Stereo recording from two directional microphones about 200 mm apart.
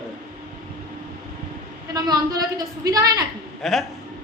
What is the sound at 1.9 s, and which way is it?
A woman's voice, 20° right (ahead or behind).